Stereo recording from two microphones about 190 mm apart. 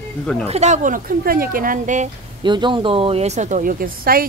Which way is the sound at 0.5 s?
35° right (ahead or behind).